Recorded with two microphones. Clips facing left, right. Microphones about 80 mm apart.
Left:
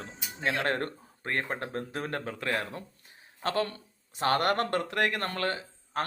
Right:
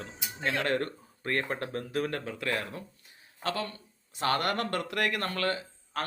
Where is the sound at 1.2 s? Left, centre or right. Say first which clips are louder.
Right 1 dB; left.